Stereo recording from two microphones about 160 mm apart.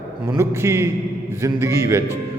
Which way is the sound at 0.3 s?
15° right (ahead or behind).